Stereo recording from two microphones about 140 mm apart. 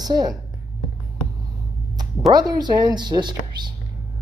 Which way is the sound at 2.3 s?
30° right (ahead or behind).